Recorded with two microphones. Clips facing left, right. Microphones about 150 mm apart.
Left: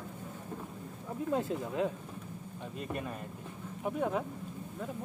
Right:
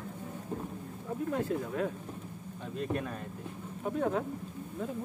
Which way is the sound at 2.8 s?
5° left (ahead or behind).